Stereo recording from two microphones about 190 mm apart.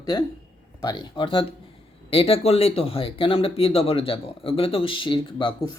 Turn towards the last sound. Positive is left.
turn(degrees=25)  # may be behind; listen again after turning